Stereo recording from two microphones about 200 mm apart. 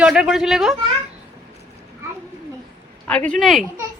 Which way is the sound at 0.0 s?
5° right (ahead or behind).